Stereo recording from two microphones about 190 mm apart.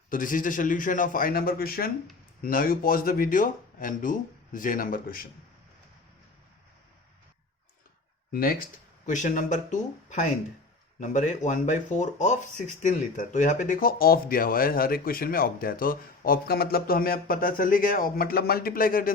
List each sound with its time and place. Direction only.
0.1 s speech: 45° left (ahead or behind)
8.3 s speech: 50° left (ahead or behind)